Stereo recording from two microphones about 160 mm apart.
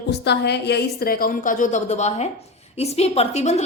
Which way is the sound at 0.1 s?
90° left.